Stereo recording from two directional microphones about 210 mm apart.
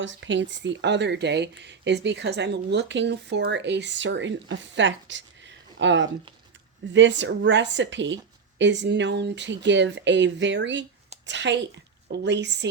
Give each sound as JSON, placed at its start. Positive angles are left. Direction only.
{"t": 0.0, "sound": "a woman's voice", "side_deg": -60}